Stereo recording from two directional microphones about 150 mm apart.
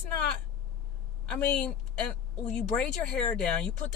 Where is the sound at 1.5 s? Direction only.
5° left (ahead or behind).